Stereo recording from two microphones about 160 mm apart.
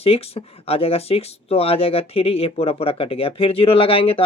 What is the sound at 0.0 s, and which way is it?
Speech, 40° left (ahead or behind).